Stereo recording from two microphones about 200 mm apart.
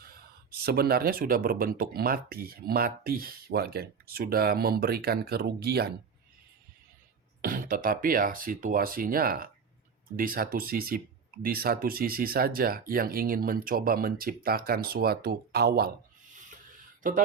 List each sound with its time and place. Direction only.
0.6 s speech: 50° right (ahead or behind)
7.4 s speech: 45° right (ahead or behind)
17.0 s speech: 40° right (ahead or behind)